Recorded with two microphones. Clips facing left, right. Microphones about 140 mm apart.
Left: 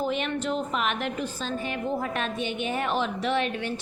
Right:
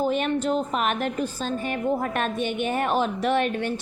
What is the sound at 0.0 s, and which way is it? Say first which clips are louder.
A woman's voice: right 4 dB; 40° right (ahead or behind).